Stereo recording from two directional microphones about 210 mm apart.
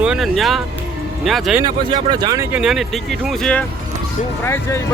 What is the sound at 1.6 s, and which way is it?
Speech, 20° right (ahead or behind).